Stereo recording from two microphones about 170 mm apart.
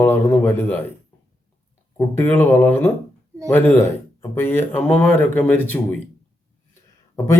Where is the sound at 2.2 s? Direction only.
10° left (ahead or behind).